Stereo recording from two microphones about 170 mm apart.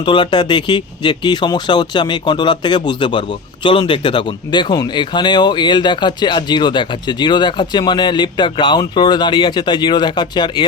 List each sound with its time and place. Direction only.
0.0 s speech: 25° left (ahead or behind)